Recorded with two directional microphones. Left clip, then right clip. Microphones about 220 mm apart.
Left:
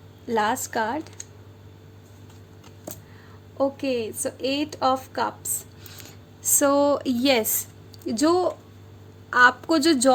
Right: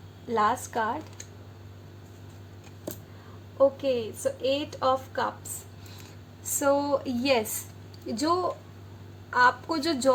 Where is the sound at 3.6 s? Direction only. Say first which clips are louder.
Right 1 dB; 50° left (ahead or behind).